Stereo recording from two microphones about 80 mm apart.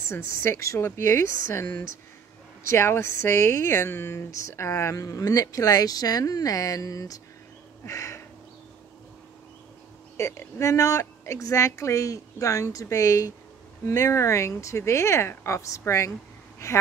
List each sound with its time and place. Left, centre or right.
0.1 s speech: left
2.7 s speech: left
7.8 s a sound: left
10.1 s speech: left